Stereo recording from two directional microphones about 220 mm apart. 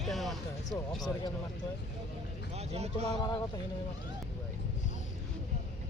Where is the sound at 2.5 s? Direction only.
30° right (ahead or behind).